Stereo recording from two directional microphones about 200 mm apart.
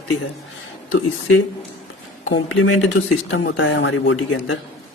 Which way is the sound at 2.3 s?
70° left (ahead or behind).